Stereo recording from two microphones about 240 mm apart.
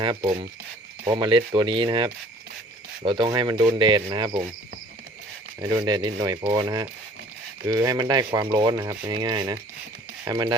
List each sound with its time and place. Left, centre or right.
0.0 s speech: centre
5.5 s speech: centre